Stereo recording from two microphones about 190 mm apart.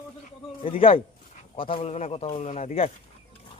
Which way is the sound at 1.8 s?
30° left (ahead or behind).